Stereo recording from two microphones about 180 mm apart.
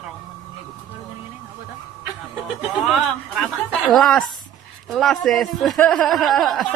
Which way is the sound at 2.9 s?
Centre (ahead or behind).